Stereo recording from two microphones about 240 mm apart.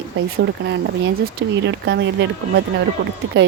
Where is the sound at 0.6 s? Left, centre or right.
Right.